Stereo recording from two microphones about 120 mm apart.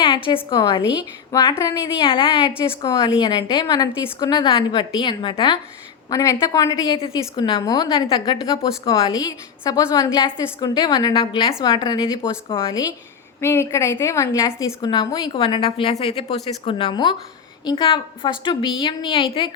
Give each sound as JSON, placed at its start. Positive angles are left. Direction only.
{"t": 0.5, "sound": "a woman's voice", "side_deg": 40}
{"t": 1.5, "sound": "a woman's voice", "side_deg": 25}
{"t": 2.0, "sound": "a woman's voice", "side_deg": 45}
{"t": 6.1, "sound": "a woman's voice", "side_deg": 30}
{"t": 9.1, "sound": "a woman's voice", "side_deg": 30}
{"t": 11.6, "sound": "a woman's voice", "side_deg": 40}
{"t": 13.4, "sound": "a woman's voice", "side_deg": 20}
{"t": 14.8, "sound": "a woman's voice", "side_deg": 40}